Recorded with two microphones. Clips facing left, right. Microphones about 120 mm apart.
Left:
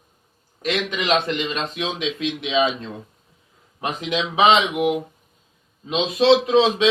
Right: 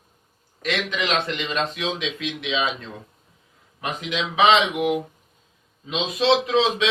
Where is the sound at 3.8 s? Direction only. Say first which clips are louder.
Left 3 dB; 30° left (ahead or behind).